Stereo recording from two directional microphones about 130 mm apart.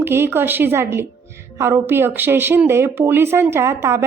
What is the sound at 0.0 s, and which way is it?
A woman's voice, 20° right (ahead or behind).